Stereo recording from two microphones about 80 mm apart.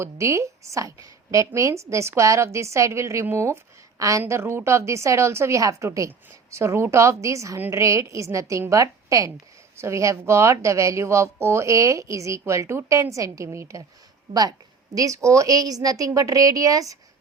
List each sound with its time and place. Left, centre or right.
0.0 s speech: right
4.2 s a woman's voice: right
14.9 s a woman's voice: right